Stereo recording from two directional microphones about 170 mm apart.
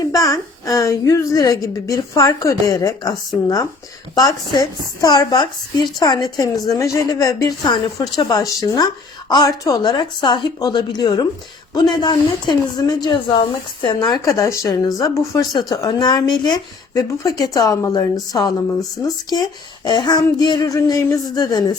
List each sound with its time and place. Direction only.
0.0 s speech: 20° left (ahead or behind)
4.1 s speech: 20° left (ahead or behind)